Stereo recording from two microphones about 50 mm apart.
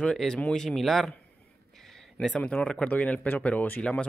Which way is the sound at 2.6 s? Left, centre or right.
Centre.